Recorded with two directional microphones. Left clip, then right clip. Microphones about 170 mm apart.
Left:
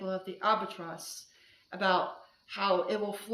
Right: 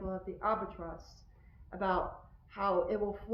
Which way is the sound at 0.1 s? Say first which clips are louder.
Left 5 dB; 30° left (ahead or behind).